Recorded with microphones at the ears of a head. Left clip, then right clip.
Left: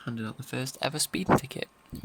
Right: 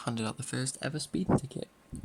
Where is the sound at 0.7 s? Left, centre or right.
Left.